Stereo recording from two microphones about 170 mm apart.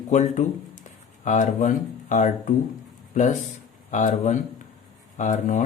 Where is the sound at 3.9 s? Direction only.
45° left (ahead or behind).